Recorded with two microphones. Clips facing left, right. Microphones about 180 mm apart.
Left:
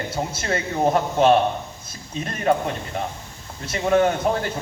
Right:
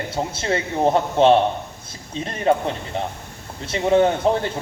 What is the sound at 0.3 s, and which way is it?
Speech, 25° right (ahead or behind).